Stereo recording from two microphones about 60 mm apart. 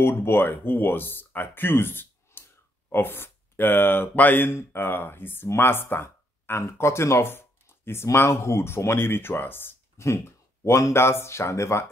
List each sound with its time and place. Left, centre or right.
0.2 s speech: left
6.6 s speech: left
9.9 s speech: left